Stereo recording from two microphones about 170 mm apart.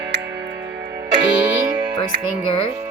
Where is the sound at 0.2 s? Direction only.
85° right.